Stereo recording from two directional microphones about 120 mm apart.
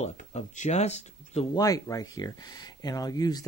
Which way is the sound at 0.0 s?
70° left (ahead or behind).